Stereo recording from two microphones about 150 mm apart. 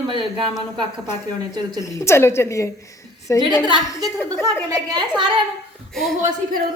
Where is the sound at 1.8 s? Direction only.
20° left (ahead or behind).